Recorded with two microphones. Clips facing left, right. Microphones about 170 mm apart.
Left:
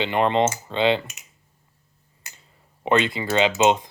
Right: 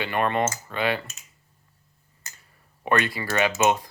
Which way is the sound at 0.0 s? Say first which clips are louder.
Left 4 dB; 20° left (ahead or behind).